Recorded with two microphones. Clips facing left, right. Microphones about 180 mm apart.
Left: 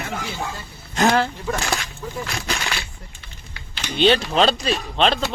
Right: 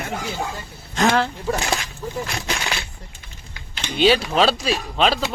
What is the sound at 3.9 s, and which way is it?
Speech, 5° right (ahead or behind).